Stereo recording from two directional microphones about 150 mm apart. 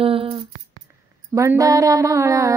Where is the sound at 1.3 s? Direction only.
20° right (ahead or behind).